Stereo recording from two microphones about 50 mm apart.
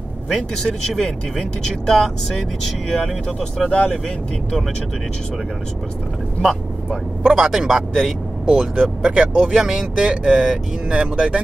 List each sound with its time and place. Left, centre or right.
0.6 s speech: centre
7.2 s speech: centre